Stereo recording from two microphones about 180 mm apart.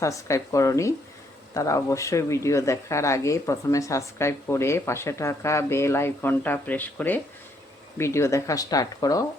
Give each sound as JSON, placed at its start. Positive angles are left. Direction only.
{"t": 0.0, "sound": "speech", "side_deg": 15}